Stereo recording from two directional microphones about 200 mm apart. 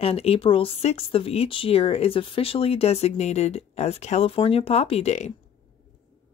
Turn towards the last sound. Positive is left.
turn(degrees=35)  # may be behind; listen again after turning